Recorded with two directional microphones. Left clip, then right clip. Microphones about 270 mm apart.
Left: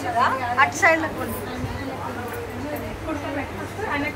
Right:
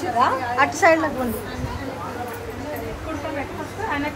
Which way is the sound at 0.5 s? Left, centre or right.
Centre.